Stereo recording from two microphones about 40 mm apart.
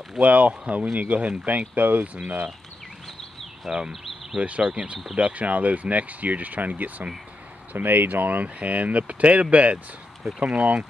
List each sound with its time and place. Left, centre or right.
0.2 s speech: right
1.8 s speech: right
3.6 s speech: centre
4.4 s speech: right
7.7 s speech: right